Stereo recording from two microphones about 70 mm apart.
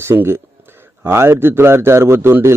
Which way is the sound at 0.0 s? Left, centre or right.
Right.